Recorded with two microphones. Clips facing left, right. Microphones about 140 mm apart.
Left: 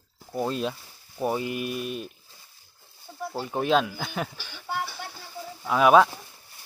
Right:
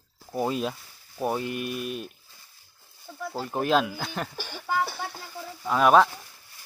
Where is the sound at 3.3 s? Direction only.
Centre (ahead or behind).